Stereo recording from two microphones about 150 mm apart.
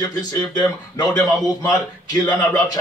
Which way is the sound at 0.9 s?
25° left (ahead or behind).